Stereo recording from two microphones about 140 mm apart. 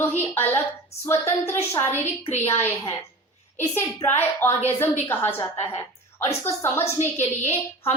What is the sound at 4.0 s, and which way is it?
A woman's voice, 20° left (ahead or behind).